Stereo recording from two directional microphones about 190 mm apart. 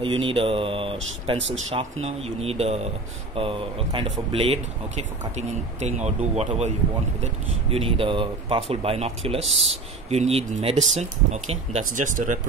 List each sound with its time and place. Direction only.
0.0 s speech: 25° right (ahead or behind)
7.7 s speech: 30° right (ahead or behind)
9.4 s speech: centre (ahead or behind)
10.0 s speech: 35° right (ahead or behind)